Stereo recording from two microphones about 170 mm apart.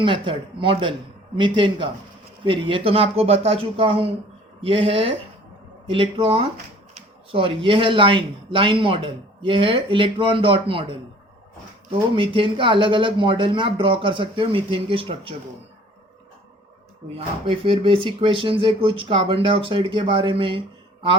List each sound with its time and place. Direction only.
0.0 s speech: 30° right (ahead or behind)
17.2 s speech: 35° right (ahead or behind)